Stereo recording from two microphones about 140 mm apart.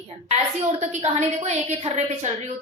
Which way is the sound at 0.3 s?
50° right (ahead or behind).